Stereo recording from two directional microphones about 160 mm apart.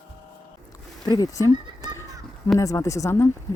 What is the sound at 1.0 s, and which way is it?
Speech, 25° left (ahead or behind).